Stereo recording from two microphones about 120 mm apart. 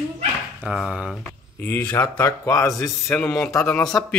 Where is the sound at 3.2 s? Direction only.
5° left (ahead or behind).